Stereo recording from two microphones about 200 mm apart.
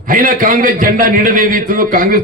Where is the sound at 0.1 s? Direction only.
40° right (ahead or behind).